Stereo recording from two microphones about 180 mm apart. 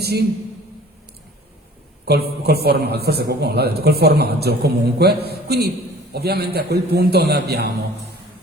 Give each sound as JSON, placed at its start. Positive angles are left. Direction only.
{"t": 0.0, "sound": "a man's voice", "side_deg": -60}
{"t": 2.4, "sound": "a man's voice", "side_deg": -60}